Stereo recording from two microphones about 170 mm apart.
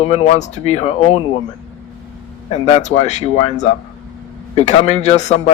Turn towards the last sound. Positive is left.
turn(degrees=45)  # may be behind; listen again after turning